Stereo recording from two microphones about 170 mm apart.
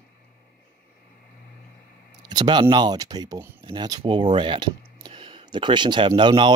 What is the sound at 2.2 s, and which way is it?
Speech, 25° right (ahead or behind).